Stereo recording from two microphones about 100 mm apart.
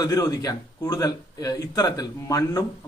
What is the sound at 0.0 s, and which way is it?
A man's voice, 40° left (ahead or behind).